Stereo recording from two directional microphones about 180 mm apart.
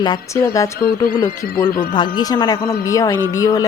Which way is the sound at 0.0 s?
20° left (ahead or behind).